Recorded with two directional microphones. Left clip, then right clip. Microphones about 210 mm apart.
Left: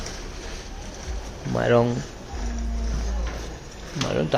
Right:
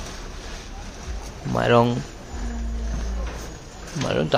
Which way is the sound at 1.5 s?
5° right (ahead or behind).